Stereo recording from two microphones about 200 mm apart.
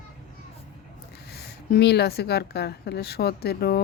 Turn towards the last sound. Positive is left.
turn(degrees=50)  # may be behind; listen again after turning